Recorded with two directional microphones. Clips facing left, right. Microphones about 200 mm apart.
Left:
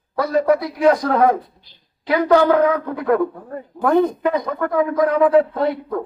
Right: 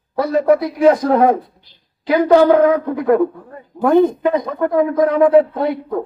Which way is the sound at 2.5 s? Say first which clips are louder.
Right 4 dB; 20° right (ahead or behind).